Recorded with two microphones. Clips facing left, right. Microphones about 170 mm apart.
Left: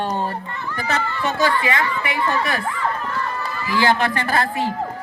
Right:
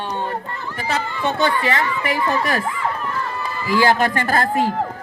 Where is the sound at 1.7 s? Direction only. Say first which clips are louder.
Right 2 dB; 35° right (ahead or behind).